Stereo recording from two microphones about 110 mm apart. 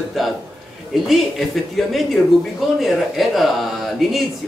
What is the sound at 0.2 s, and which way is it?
Speech, centre (ahead or behind).